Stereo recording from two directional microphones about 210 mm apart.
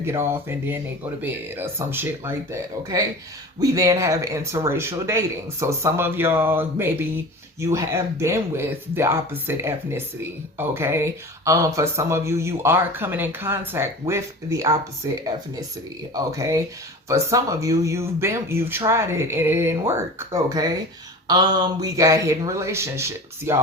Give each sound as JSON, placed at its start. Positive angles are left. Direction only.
{"t": 0.0, "sound": "speech", "side_deg": -10}